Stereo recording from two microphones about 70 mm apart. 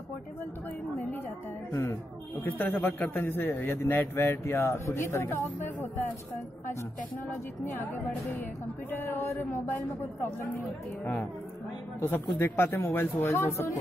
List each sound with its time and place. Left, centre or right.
2.4 s a man's voice: left
8.9 s a man's voice: left
12.1 s a man's voice: left